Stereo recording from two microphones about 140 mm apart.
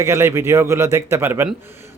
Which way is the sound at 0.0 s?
20° right (ahead or behind).